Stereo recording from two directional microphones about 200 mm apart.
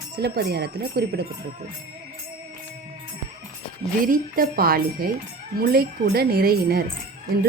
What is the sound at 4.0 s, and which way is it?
Speech, 45° right (ahead or behind).